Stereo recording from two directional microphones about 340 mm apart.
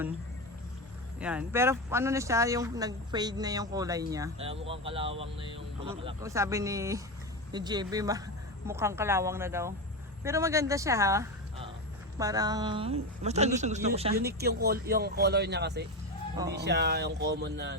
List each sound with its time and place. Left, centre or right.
1.2 s speech: centre
14.3 s speech: right